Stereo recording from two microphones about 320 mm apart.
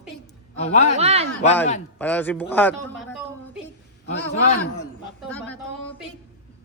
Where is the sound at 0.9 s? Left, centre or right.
Centre.